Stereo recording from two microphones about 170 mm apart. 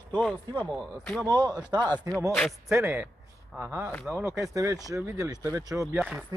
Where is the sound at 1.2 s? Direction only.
25° right (ahead or behind).